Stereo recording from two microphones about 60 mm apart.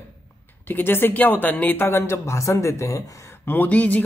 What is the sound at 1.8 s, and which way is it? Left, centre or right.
Speech, left.